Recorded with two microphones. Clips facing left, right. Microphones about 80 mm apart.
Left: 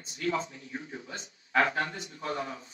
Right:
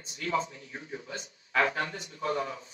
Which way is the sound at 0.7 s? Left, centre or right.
Right.